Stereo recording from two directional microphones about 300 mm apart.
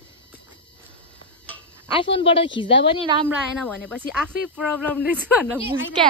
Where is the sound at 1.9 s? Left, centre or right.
Centre.